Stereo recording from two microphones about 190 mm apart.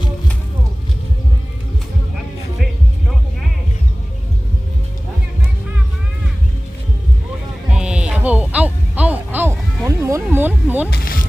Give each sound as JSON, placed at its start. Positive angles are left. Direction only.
{"t": 7.7, "sound": "music", "side_deg": -5}
{"t": 10.9, "sound": "music", "side_deg": 50}